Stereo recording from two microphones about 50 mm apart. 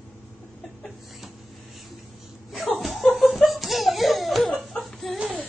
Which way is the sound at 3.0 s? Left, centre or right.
Left.